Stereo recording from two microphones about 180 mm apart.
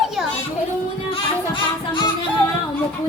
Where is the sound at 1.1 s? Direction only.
25° left (ahead or behind).